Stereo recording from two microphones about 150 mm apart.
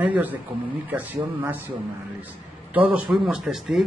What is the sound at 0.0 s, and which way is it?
A man's voice, 10° right (ahead or behind).